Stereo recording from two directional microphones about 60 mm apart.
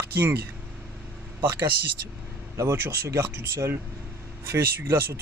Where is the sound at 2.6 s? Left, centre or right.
Right.